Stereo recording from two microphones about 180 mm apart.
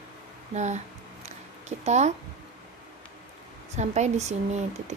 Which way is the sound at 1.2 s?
40° right (ahead or behind).